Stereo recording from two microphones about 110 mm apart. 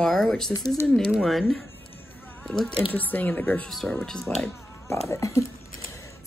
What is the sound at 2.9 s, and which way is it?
Speech, 15° left (ahead or behind).